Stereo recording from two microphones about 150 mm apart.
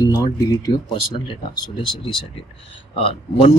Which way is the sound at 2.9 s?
40° left (ahead or behind).